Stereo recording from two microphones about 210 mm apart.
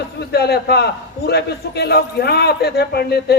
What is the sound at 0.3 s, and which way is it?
A man's voice, 50° left (ahead or behind).